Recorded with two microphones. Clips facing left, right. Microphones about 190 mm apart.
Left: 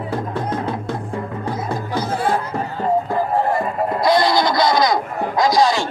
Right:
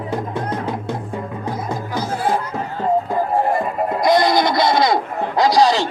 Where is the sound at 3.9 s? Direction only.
20° right (ahead or behind).